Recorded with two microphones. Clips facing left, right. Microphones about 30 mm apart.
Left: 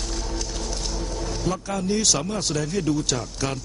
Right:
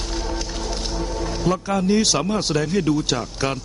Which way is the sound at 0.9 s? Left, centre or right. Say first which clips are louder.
Right 4 dB; right.